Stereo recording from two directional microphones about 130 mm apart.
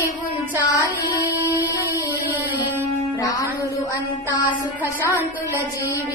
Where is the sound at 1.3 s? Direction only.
15° right (ahead or behind).